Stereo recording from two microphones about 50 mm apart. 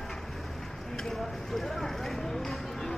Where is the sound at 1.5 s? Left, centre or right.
Centre.